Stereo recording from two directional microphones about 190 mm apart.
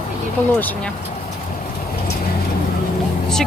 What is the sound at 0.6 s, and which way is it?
Speech, 10° left (ahead or behind).